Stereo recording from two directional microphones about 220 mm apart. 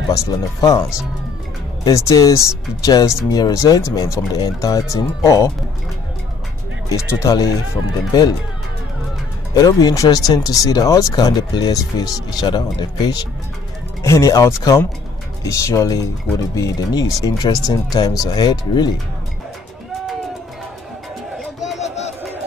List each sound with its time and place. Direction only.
0.1 s speech: 15° left (ahead or behind)
1.9 s speech: 15° left (ahead or behind)
7.1 s speech: 15° left (ahead or behind)
9.5 s speech: 15° left (ahead or behind)
21.7 s a sound: 30° left (ahead or behind)